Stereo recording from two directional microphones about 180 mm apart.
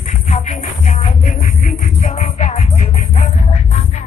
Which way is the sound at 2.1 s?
35° left (ahead or behind).